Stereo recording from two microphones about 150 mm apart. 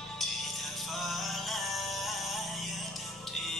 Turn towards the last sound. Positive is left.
turn(degrees=0)  # may be behind; listen again after turning